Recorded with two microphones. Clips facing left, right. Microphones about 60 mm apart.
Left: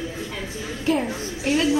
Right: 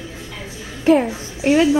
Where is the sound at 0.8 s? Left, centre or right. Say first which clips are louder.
Right 8 dB; right.